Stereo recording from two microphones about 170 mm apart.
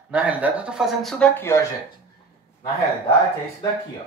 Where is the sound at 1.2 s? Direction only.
15° left (ahead or behind).